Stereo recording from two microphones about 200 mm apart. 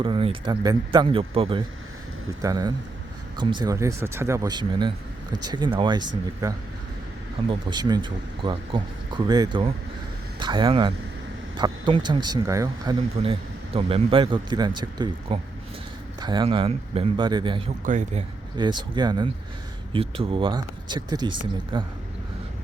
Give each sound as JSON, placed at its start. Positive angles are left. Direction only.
{"t": 0.0, "sound": "speech", "side_deg": -25}
{"t": 17.8, "sound": "speech", "side_deg": -40}
{"t": 18.5, "sound": "speech", "side_deg": -20}